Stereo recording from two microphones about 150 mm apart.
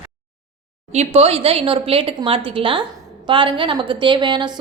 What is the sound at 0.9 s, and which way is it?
A woman's voice, 45° right (ahead or behind).